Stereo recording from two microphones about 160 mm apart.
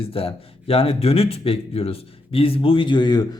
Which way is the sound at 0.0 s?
35° left (ahead or behind).